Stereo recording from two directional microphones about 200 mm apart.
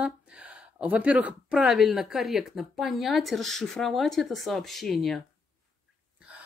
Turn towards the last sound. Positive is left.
turn(degrees=0)  # may be behind; listen again after turning